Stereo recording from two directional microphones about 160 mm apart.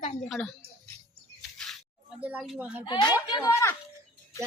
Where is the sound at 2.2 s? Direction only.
10° right (ahead or behind).